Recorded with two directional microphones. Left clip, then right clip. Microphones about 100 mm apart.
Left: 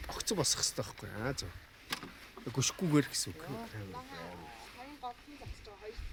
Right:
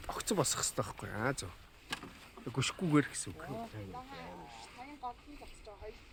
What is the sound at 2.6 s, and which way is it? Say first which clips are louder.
Speech: even; 60° left (ahead or behind).